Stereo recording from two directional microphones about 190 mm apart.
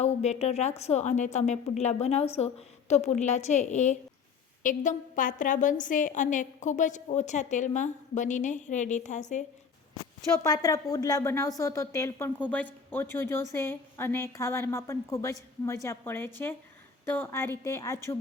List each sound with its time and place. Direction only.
0.0 s a woman's voice: 35° left (ahead or behind)
10.3 s a woman's voice: 20° left (ahead or behind)